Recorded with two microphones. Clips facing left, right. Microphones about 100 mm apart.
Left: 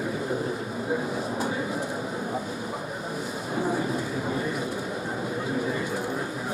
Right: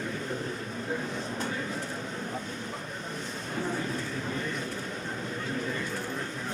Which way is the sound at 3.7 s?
15° left (ahead or behind).